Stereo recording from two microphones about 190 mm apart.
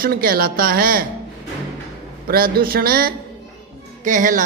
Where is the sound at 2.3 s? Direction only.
50° right (ahead or behind).